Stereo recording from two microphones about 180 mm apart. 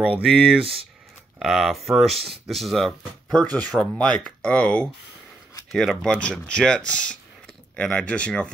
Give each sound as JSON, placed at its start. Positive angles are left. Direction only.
{"t": 0.2, "sound": "speech", "side_deg": 0}
{"t": 0.6, "sound": "speech", "side_deg": -30}
{"t": 1.4, "sound": "speech", "side_deg": 0}